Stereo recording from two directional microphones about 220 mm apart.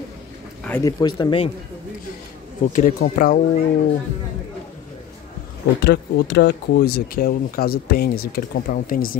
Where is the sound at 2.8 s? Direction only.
40° left (ahead or behind).